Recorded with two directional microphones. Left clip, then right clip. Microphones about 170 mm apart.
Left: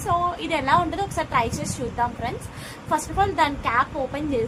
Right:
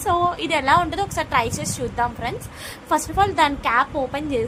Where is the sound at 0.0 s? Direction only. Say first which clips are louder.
Right 3 dB; 55° right (ahead or behind).